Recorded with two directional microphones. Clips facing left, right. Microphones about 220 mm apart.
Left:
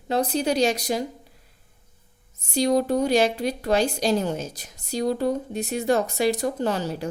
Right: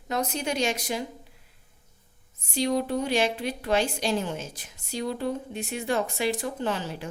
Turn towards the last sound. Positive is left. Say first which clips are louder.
# left 5 dB
turn(degrees=40)  # may be behind; listen again after turning